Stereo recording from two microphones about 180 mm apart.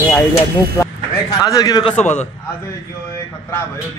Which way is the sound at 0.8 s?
15° left (ahead or behind).